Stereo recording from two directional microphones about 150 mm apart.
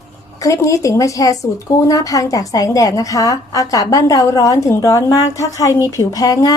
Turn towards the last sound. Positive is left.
turn(degrees=25)  # may be behind; listen again after turning